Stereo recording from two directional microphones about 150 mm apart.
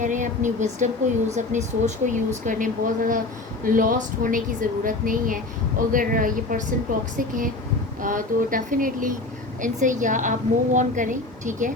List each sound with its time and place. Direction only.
0.0 s a woman's voice: 55° right (ahead or behind)